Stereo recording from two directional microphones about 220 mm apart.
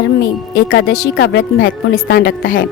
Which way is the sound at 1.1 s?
55° left (ahead or behind).